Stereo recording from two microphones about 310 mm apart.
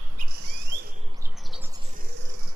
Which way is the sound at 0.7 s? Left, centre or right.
Right.